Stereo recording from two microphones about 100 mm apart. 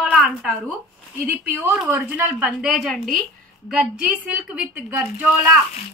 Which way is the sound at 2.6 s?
Centre (ahead or behind).